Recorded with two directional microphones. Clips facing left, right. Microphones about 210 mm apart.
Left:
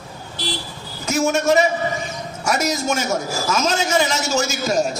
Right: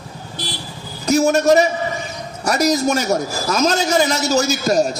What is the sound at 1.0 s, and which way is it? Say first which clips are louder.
A man's voice: right 4 dB; 35° right (ahead or behind).